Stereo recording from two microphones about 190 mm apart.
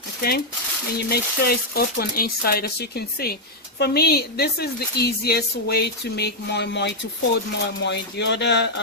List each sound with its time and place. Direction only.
0.2 s speech: 55° left (ahead or behind)